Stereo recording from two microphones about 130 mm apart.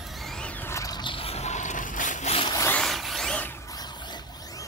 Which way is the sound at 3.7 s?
30° left (ahead or behind).